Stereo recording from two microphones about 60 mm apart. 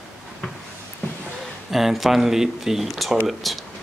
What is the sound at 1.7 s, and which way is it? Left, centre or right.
Speech, centre.